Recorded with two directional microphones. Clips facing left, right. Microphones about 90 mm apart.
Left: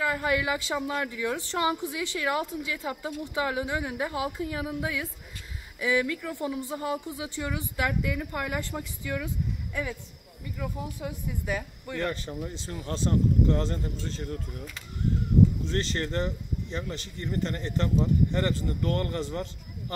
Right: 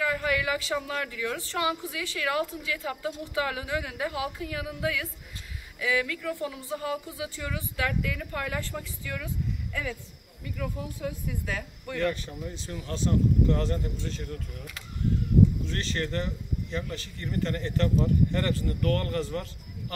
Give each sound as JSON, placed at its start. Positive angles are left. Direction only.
{"t": 0.0, "sound": "speech", "side_deg": 30}
{"t": 5.8, "sound": "speech", "side_deg": 25}
{"t": 10.6, "sound": "speech", "side_deg": 20}
{"t": 12.0, "sound": "speech", "side_deg": 30}
{"t": 15.6, "sound": "speech", "side_deg": 30}